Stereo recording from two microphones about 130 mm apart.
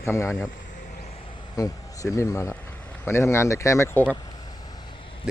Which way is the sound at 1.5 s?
25° left (ahead or behind).